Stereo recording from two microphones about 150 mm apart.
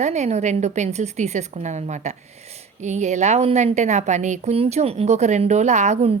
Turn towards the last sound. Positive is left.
turn(degrees=-45)  # may be behind; listen again after turning